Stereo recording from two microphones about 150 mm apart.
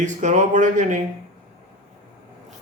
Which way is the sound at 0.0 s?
55° right (ahead or behind).